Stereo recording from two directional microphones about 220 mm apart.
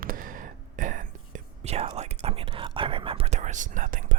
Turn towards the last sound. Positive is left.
turn(degrees=-35)  # may be behind; listen again after turning